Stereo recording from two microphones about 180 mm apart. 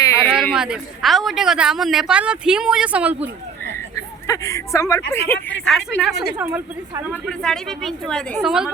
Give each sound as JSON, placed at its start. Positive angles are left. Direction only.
{"t": 0.0, "sound": "a sound", "side_deg": 15}
{"t": 0.5, "sound": "speech", "side_deg": -5}
{"t": 4.3, "sound": "speech", "side_deg": 15}
{"t": 6.0, "sound": "speech", "side_deg": -5}
{"t": 6.3, "sound": "a woman's voice", "side_deg": -15}
{"t": 7.3, "sound": "speech", "side_deg": 5}